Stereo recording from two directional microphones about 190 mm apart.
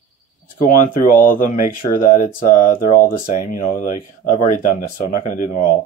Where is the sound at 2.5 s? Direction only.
45° left (ahead or behind).